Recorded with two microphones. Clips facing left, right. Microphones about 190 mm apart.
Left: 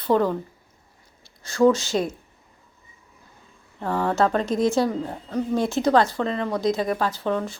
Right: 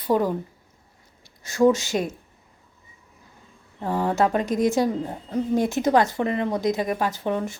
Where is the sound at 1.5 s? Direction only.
20° right (ahead or behind).